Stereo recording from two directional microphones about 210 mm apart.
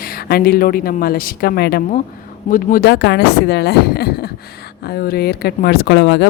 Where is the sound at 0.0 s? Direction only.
45° left (ahead or behind).